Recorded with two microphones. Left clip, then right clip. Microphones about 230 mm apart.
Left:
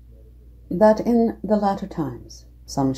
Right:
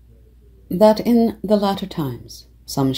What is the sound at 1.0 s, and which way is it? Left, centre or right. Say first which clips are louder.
Speech: right 2 dB; right.